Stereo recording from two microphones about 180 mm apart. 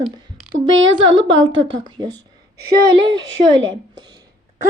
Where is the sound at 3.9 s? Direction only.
25° right (ahead or behind).